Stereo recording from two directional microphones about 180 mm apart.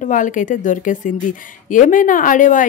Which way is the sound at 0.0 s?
45° left (ahead or behind).